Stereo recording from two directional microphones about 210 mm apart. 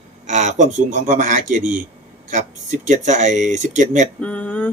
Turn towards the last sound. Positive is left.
turn(degrees=10)  # may be behind; listen again after turning